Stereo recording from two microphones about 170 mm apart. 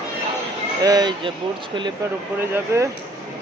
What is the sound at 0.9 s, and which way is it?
Speech, 25° right (ahead or behind).